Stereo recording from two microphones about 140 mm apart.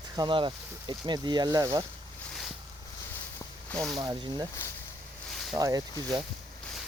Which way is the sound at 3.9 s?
30° right (ahead or behind).